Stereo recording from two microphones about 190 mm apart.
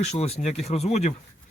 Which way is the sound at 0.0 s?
35° left (ahead or behind).